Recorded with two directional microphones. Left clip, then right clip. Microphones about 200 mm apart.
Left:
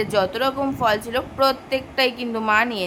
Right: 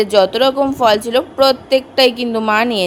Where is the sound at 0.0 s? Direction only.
25° right (ahead or behind).